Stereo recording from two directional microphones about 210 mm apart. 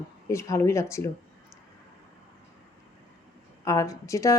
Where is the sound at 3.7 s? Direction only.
15° left (ahead or behind).